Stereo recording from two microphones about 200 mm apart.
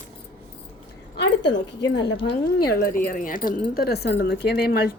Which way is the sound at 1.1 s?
60° left (ahead or behind).